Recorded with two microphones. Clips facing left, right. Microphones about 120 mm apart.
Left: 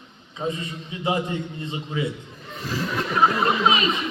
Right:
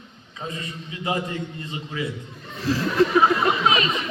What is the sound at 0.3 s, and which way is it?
A man's voice, 25° left (ahead or behind).